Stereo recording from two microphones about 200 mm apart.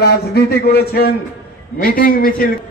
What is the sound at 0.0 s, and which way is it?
A man's voice, 50° left (ahead or behind).